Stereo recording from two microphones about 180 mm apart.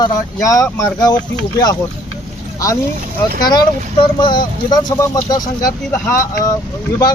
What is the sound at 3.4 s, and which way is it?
Speech, 25° left (ahead or behind).